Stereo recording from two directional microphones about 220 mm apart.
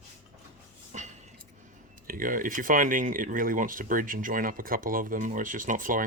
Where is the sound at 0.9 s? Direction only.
30° right (ahead or behind).